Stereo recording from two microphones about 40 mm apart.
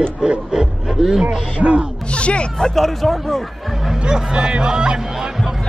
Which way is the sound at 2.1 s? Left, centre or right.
Left.